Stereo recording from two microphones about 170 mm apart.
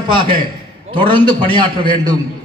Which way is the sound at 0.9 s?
30° right (ahead or behind).